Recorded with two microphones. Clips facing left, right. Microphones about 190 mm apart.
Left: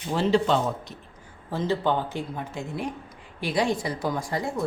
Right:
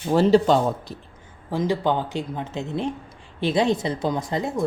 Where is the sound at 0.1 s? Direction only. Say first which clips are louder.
Right 6 dB; 40° right (ahead or behind).